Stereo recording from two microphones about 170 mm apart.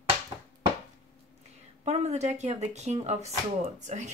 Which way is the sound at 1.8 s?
40° right (ahead or behind).